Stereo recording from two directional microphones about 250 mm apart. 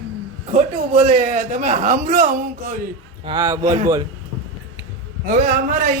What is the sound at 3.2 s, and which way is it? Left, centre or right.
Speech, centre.